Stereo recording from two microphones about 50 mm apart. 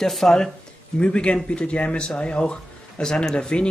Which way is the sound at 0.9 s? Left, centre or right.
Left.